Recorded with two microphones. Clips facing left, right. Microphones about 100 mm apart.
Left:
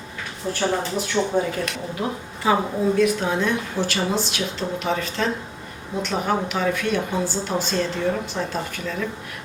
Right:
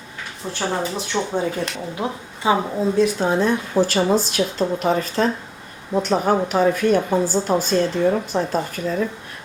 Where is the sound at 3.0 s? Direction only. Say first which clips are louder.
Right 5 dB; 35° right (ahead or behind).